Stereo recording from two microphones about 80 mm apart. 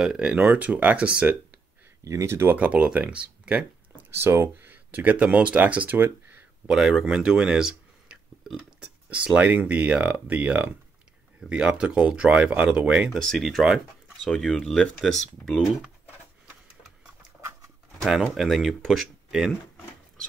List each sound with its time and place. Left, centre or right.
0.0 s speech: centre
2.0 s speech: right
2.5 s speech: centre
4.1 s speech: right
6.7 s speech: centre
13.1 s speech: centre
14.2 s speech: centre
18.0 s speech: centre